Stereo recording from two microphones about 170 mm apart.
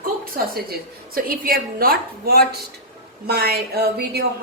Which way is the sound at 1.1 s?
60° right (ahead or behind).